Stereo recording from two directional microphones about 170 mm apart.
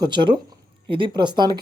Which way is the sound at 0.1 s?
30° right (ahead or behind).